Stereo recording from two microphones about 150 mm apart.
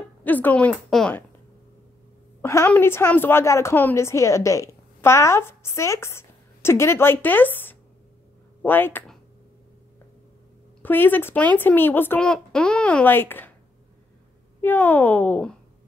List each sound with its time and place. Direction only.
0.2 s a woman's voice: 10° left (ahead or behind)
2.4 s a woman's voice: 15° left (ahead or behind)
10.8 s a woman's voice: 10° left (ahead or behind)
14.6 s a woman's voice: 15° left (ahead or behind)